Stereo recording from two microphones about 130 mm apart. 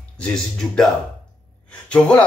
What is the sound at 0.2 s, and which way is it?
Speech, 5° left (ahead or behind).